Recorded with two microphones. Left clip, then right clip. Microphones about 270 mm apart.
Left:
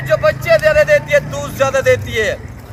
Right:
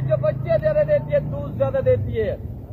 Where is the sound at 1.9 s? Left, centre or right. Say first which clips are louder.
Left 7 dB; centre.